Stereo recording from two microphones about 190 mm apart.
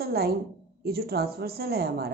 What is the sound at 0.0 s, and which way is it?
A woman's voice, 55° right (ahead or behind).